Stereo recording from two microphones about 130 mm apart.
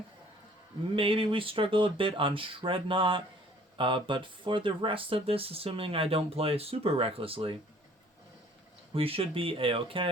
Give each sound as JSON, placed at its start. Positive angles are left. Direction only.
{"t": 0.9, "sound": "speech", "side_deg": -45}
{"t": 8.9, "sound": "speech", "side_deg": -45}